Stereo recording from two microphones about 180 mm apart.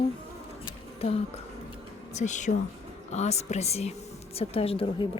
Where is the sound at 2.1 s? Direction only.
40° left (ahead or behind).